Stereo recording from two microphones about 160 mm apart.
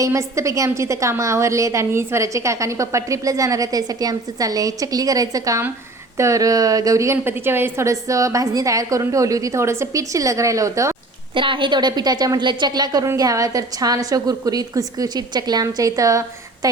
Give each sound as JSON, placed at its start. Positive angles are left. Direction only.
{"t": 0.0, "sound": "a woman's voice", "side_deg": -20}
{"t": 11.3, "sound": "a woman's voice", "side_deg": -30}